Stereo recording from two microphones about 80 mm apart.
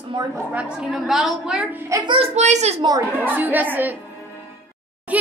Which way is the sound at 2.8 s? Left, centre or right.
Right.